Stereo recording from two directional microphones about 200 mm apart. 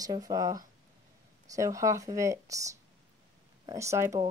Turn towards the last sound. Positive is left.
turn(degrees=-15)  # may be behind; listen again after turning